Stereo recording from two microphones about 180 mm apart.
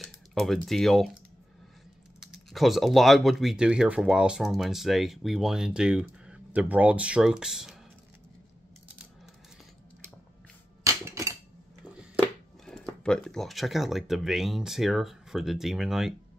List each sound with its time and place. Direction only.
0.0 s speech: centre (ahead or behind)
2.1 s speech: centre (ahead or behind)
10.8 s a sound: 15° right (ahead or behind)
12.6 s speech: 5° left (ahead or behind)